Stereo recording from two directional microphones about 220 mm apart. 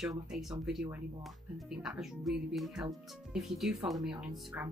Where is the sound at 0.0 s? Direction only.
Centre (ahead or behind).